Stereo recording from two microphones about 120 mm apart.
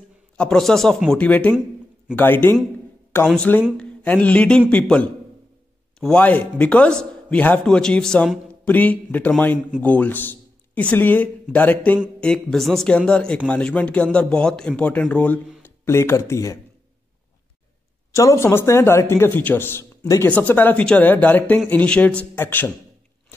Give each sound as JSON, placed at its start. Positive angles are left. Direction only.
{"t": 0.4, "sound": "a man's voice", "side_deg": 5}
{"t": 18.1, "sound": "a man's voice", "side_deg": 25}